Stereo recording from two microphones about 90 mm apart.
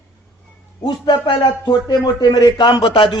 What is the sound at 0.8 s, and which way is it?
A man's voice, 50° left (ahead or behind).